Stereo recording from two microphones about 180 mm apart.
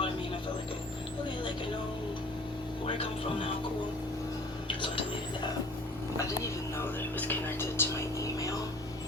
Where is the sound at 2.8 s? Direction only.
30° left (ahead or behind).